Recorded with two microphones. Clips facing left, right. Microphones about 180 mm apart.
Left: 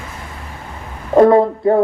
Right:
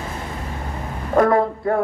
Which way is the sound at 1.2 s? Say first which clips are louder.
Left 7 dB; 25° left (ahead or behind).